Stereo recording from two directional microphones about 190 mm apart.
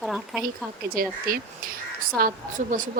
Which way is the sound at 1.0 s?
50° right (ahead or behind).